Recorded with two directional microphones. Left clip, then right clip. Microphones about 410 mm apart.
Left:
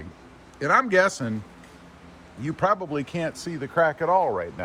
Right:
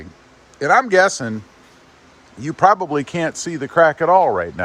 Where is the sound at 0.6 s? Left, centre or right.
Centre.